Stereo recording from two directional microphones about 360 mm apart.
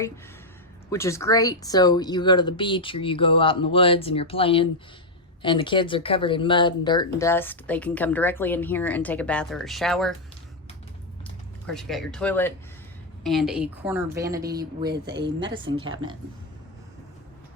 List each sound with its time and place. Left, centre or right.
0.9 s speech: centre
11.2 s speech: centre
15.0 s a woman's voice: right
15.4 s speech: centre
15.8 s speech: right